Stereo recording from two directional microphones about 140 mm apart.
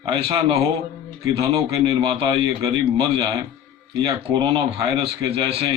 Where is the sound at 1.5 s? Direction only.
35° right (ahead or behind).